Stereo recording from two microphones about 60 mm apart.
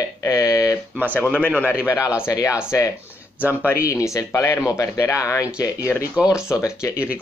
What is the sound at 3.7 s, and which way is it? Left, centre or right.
Speech, left.